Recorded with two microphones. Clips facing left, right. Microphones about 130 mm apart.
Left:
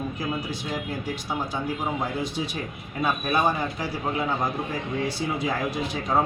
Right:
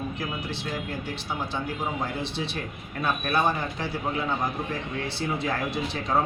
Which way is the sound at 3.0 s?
10° left (ahead or behind).